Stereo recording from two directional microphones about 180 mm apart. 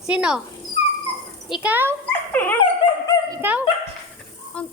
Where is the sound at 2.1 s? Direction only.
10° left (ahead or behind).